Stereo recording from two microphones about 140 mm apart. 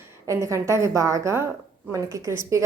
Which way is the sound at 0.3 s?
20° right (ahead or behind).